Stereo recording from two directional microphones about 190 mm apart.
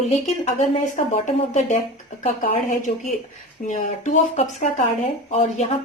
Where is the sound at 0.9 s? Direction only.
40° left (ahead or behind).